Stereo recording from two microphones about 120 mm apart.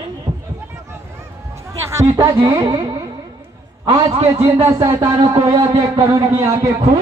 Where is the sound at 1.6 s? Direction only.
25° right (ahead or behind).